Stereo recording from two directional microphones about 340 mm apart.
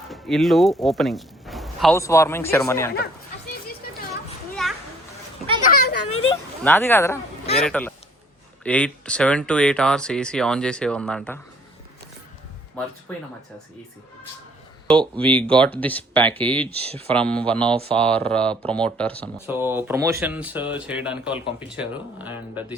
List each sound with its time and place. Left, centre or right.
0.1 s speech: centre
4.6 s a sound: centre
5.6 s children playing: left
6.6 s speech: centre
15.2 s speech: centre